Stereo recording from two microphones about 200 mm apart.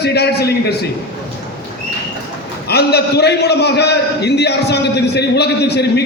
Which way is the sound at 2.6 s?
55° left (ahead or behind).